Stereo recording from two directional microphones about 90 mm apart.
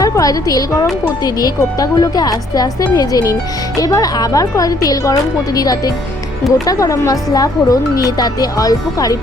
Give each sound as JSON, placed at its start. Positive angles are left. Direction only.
{"t": 0.0, "sound": "a woman's voice", "side_deg": 40}